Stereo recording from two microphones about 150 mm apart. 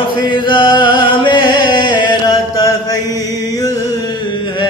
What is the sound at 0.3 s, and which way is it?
Music, 30° left (ahead or behind).